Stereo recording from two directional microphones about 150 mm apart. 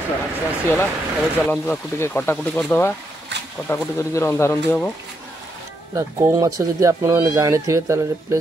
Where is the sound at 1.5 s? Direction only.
10° left (ahead or behind).